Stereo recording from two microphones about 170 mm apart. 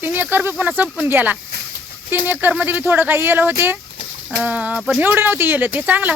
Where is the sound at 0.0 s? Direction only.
10° right (ahead or behind).